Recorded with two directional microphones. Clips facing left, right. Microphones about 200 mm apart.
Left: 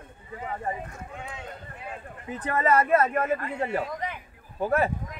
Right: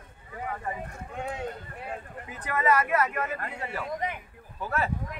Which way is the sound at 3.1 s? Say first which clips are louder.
Left 6 dB; 50° left (ahead or behind).